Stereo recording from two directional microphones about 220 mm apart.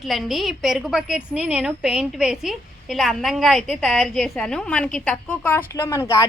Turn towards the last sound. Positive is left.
turn(degrees=15)  # may be behind; listen again after turning